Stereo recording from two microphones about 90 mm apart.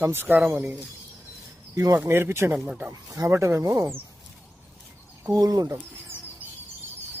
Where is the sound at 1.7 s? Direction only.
40° right (ahead or behind).